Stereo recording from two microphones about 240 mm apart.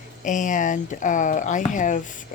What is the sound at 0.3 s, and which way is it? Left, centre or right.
Speech, left.